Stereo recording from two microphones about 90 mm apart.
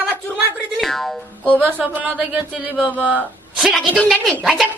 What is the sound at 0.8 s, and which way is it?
Music, 5° left (ahead or behind).